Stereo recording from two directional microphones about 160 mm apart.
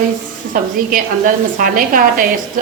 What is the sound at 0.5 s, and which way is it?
A woman's voice, 60° right (ahead or behind).